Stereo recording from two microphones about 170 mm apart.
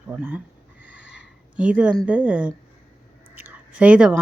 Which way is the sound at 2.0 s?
5° right (ahead or behind).